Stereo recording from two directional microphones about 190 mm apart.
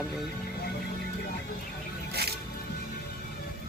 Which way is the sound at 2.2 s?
55° right (ahead or behind).